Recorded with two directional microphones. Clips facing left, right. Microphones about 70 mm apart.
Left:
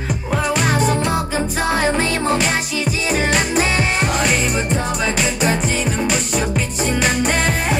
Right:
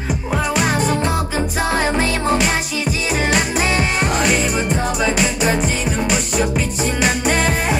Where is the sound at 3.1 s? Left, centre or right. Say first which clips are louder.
Left 1 dB; centre.